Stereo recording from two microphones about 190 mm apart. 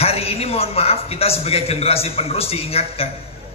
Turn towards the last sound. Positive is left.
turn(degrees=30)  # may be behind; listen again after turning